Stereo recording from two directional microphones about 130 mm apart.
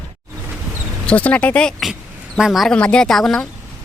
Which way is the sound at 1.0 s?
10° left (ahead or behind).